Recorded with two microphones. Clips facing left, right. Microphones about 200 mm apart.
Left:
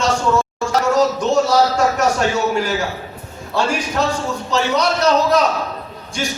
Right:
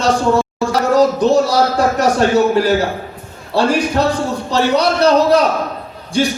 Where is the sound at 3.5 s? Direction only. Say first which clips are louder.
Right 5 dB; 35° right (ahead or behind).